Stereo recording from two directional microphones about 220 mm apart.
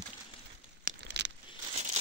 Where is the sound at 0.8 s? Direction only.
50° right (ahead or behind).